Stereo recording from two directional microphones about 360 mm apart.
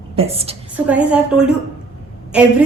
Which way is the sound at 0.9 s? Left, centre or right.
Centre.